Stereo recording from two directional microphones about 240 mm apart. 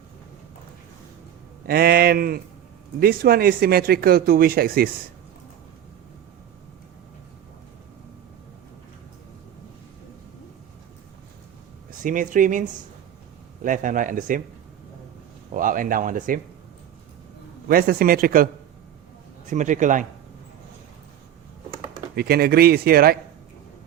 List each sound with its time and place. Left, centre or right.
1.6 s speech: right
11.9 s speech: right
15.5 s speech: right
17.7 s speech: right
19.5 s speech: right
22.1 s speech: right